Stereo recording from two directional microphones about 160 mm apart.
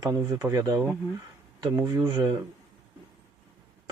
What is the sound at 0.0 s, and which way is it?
Speech, 20° right (ahead or behind).